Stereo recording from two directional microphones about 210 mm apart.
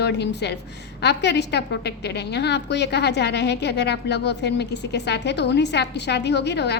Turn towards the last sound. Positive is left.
turn(degrees=55)  # may be behind; listen again after turning